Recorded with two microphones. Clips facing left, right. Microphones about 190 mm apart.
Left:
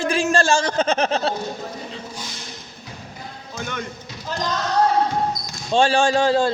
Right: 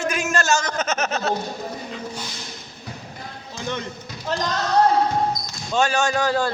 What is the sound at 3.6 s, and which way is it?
Music, 30° right (ahead or behind).